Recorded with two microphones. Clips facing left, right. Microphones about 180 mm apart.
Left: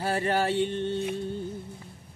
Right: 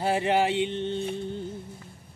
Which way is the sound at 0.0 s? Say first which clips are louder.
Right 2 dB; 15° right (ahead or behind).